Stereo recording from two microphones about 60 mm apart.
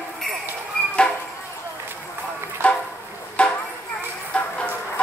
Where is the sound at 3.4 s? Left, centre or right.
Left.